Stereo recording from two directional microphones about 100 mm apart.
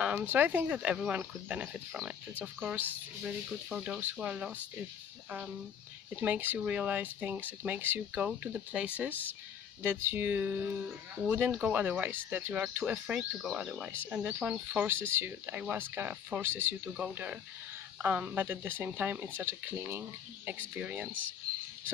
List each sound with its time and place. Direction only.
0.0 s speech: 15° right (ahead or behind)
2.3 s speech: 15° right (ahead or behind)
6.2 s speech: 15° right (ahead or behind)
14.9 s speech: 25° right (ahead or behind)